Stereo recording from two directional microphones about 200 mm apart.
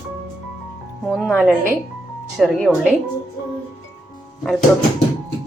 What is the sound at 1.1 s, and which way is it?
A woman's voice, 5° right (ahead or behind).